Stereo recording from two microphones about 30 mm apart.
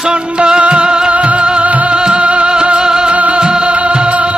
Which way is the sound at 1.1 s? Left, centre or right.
Right.